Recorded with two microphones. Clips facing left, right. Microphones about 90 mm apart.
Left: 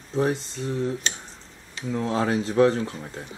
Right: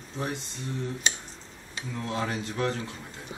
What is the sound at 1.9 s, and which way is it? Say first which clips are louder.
Speech: left 7 dB; 30° left (ahead or behind).